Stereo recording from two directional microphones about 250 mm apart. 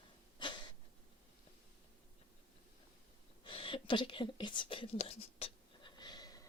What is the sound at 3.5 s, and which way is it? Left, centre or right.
Whispering, left.